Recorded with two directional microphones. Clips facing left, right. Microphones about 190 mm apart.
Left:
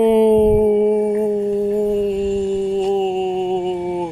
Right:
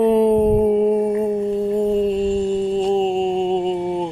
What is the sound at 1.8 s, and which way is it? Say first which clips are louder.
Mantra: left 1 dB; 10° left (ahead or behind).